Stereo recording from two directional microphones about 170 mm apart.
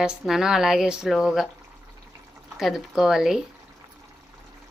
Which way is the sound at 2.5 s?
Centre (ahead or behind).